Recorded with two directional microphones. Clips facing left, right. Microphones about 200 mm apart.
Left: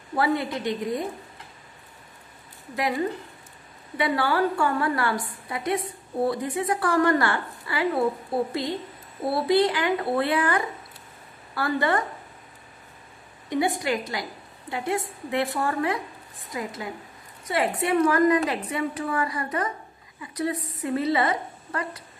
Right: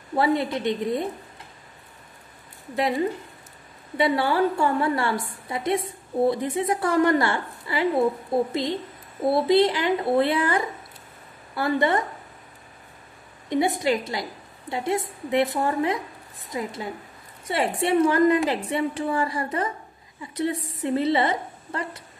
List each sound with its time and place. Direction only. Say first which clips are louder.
0.1 s a woman's voice: right 2 dB; 20° right (ahead or behind)
2.7 s a woman's voice: right 2 dB; 25° right (ahead or behind)
13.5 s a woman's voice: right 2 dB; 25° right (ahead or behind)